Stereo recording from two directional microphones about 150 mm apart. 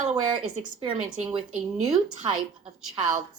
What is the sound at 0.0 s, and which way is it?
Speech, 30° right (ahead or behind).